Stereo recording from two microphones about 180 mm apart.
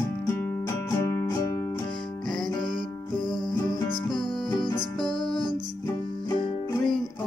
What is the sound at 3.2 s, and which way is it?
Music, 20° left (ahead or behind).